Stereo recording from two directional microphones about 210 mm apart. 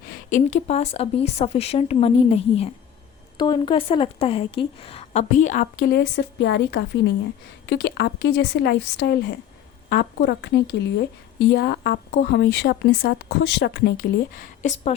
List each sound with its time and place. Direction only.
0.1 s a woman's voice: 35° left (ahead or behind)
6.0 s a woman's voice: 55° left (ahead or behind); by 14.9 s 35° left (ahead or behind)